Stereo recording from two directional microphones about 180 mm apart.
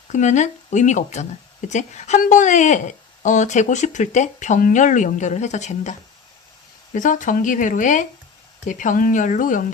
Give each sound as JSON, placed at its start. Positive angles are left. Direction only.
{"t": 0.1, "sound": "speech", "side_deg": 40}